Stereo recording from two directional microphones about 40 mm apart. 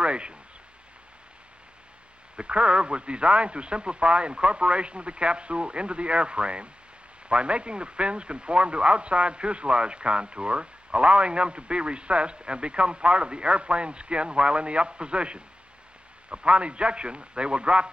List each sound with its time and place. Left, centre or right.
0.0 s speech: right
2.3 s speech: right